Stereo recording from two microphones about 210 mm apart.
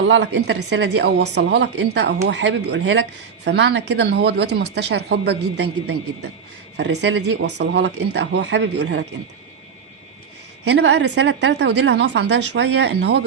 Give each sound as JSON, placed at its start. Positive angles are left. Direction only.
{"t": 0.1, "sound": "a woman's voice", "side_deg": -55}
{"t": 6.7, "sound": "a woman's voice", "side_deg": -55}
{"t": 10.7, "sound": "a woman's voice", "side_deg": -55}